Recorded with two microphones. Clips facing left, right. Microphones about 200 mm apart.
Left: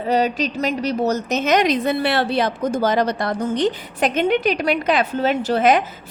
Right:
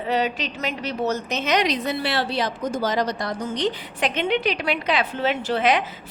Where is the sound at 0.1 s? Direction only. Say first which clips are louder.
Left 5 dB; 40° left (ahead or behind).